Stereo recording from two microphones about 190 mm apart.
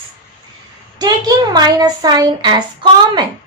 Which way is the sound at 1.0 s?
20° right (ahead or behind).